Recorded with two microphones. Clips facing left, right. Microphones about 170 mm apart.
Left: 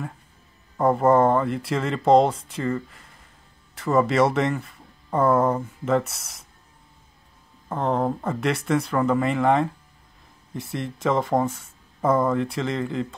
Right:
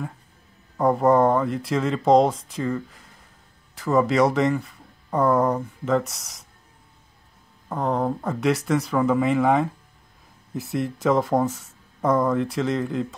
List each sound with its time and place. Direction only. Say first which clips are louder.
0.7 s speech: even; centre (ahead or behind)
7.7 s speech: even; centre (ahead or behind)